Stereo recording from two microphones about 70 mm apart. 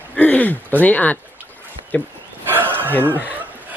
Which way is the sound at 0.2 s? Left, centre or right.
Left.